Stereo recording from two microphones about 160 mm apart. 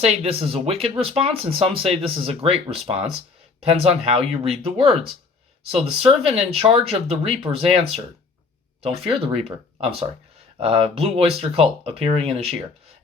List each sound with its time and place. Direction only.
0.0 s speech: 40° right (ahead or behind)
10.6 s speech: 35° right (ahead or behind)